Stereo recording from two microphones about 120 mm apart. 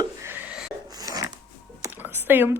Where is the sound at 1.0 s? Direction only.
30° right (ahead or behind).